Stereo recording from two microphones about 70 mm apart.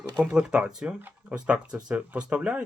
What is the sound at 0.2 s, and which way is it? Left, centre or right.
Speech, centre.